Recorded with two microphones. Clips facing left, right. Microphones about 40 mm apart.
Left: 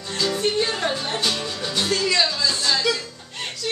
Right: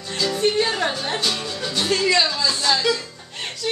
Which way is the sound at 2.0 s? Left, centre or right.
Right.